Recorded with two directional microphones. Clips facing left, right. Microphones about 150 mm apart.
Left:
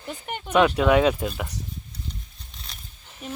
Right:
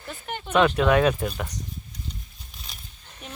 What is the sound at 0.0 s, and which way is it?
Speech, 15° left (ahead or behind).